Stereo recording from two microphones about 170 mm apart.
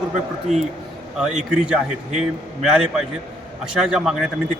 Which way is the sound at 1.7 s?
5° right (ahead or behind).